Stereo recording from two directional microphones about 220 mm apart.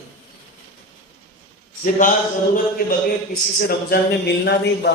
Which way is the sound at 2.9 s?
45° left (ahead or behind).